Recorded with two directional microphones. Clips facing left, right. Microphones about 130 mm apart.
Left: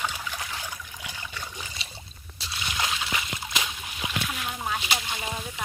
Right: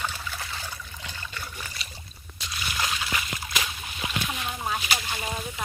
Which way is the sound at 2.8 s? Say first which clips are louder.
Even; 20° left (ahead or behind).